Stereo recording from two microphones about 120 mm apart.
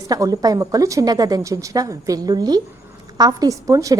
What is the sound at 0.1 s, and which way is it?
Speech, 30° right (ahead or behind).